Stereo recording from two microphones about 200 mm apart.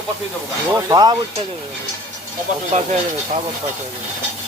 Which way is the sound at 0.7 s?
20° right (ahead or behind).